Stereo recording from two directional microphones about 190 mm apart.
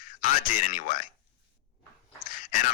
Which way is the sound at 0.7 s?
45° left (ahead or behind).